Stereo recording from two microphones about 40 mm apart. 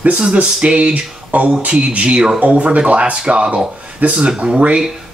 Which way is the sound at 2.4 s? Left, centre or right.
Right.